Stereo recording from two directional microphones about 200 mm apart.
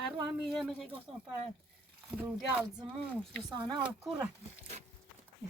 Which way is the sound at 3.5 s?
20° right (ahead or behind).